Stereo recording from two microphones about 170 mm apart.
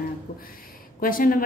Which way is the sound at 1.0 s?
55° left (ahead or behind).